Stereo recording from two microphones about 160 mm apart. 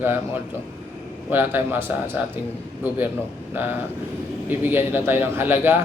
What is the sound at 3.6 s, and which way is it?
A man's voice, 15° right (ahead or behind).